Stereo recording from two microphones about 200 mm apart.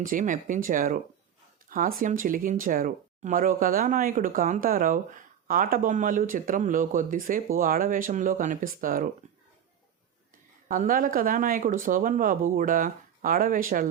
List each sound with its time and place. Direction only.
0.0 s speech: 40° right (ahead or behind)
9.2 s a sound: 35° right (ahead or behind)
10.7 s speech: 45° right (ahead or behind)